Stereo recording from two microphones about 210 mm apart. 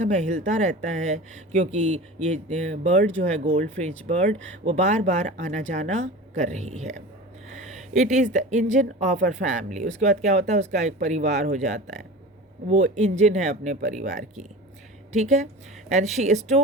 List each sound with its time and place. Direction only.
0.0 s speech: 35° right (ahead or behind)